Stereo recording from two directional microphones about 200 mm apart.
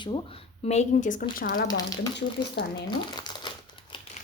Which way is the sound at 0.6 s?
35° left (ahead or behind).